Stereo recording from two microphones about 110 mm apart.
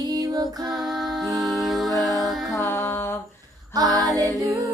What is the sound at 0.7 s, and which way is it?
Music, centre (ahead or behind).